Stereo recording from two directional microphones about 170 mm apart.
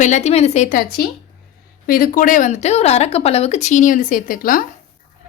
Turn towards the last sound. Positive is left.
turn(degrees=55)  # may be behind; listen again after turning